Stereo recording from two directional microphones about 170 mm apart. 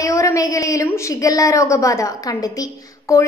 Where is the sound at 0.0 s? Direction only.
20° left (ahead or behind).